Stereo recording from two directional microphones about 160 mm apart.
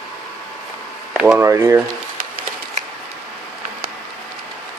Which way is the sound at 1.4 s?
15° right (ahead or behind).